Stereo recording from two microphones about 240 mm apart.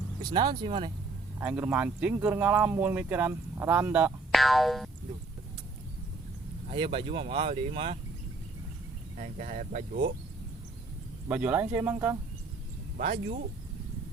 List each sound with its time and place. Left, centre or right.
0.2 s speech: centre
1.4 s speech: centre
6.7 s speech: right
9.1 s speech: right
11.3 s speech: centre
13.0 s speech: right